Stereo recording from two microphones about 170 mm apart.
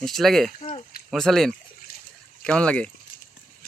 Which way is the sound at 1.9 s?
60° left (ahead or behind).